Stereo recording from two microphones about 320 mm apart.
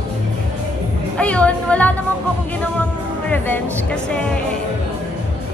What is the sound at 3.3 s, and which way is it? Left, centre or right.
Speech, centre.